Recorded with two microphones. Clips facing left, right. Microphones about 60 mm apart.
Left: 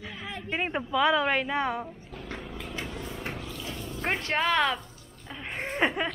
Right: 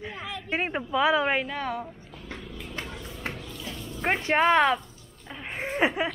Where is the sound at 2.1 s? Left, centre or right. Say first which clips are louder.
Left 2 dB; left.